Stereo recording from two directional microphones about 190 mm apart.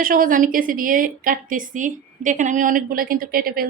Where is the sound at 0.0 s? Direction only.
45° right (ahead or behind).